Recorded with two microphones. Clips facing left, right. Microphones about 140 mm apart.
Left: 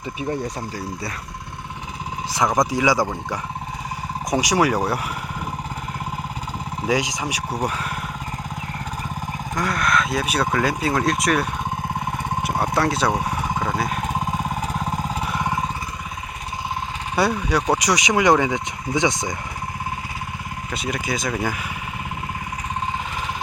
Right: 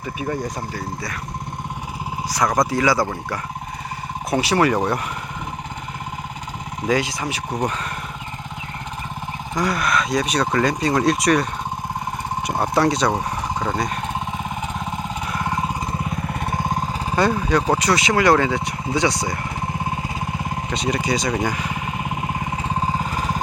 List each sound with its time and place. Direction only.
0.2 s speech: 25° left (ahead or behind)
2.3 s speech: 20° left (ahead or behind)
4.3 s speech: 15° left (ahead or behind)
6.8 s speech: 15° left (ahead or behind)
9.6 s speech: centre (ahead or behind)
12.4 s a sound: centre (ahead or behind)
15.3 s vehicle: 15° left (ahead or behind)
17.2 s speech: 10° left (ahead or behind)
20.7 s speech: centre (ahead or behind)
22.7 s vehicle: 35° right (ahead or behind)